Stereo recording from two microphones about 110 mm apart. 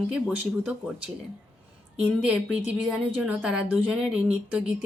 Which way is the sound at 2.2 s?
5° right (ahead or behind).